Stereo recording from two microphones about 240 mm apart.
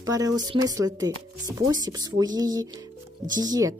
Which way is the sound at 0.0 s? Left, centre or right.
Centre.